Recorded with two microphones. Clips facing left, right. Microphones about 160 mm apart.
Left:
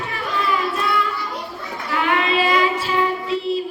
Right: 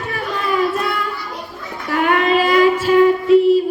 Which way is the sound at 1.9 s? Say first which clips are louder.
Right 5 dB; 50° right (ahead or behind).